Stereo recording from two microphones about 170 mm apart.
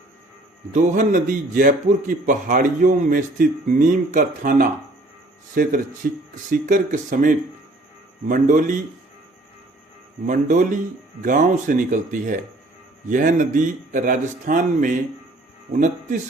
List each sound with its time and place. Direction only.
0.7 s a man's voice: 45° right (ahead or behind)
10.2 s a man's voice: 50° right (ahead or behind)